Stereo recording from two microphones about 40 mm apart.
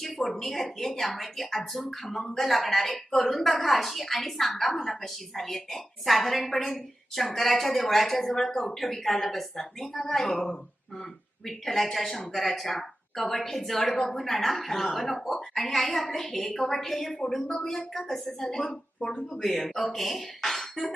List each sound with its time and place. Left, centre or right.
0.2 s a woman's voice: centre
19.3 s a woman's voice: centre